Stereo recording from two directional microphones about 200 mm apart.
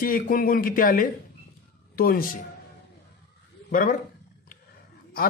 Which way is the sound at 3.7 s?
45° left (ahead or behind).